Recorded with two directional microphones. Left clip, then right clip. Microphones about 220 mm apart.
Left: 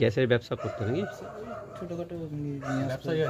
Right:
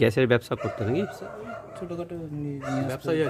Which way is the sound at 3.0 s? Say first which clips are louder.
Right 4 dB; 25° right (ahead or behind).